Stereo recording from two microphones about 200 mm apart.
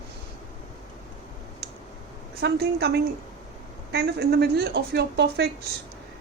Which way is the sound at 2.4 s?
55° right (ahead or behind).